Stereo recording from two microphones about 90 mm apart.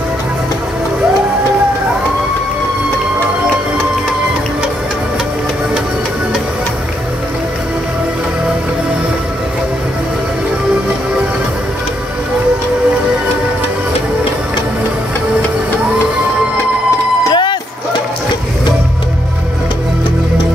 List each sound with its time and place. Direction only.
17.3 s music: 60° left (ahead or behind)